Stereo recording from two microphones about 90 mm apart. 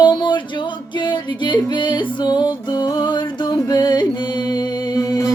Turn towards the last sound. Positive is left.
turn(degrees=50)  # may be behind; listen again after turning